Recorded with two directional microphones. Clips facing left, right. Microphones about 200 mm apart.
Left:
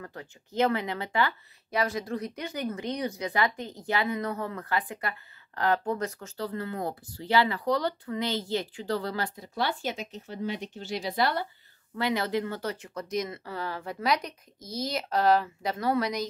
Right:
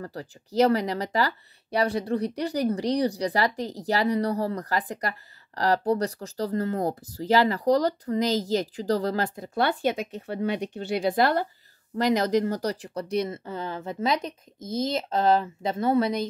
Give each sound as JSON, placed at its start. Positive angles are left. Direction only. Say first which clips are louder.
{"t": 0.0, "sound": "a woman's voice", "louder": "right 6 dB", "side_deg": -35}